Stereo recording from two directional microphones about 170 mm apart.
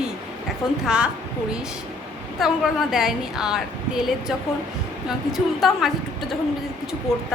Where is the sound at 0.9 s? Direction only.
5° right (ahead or behind).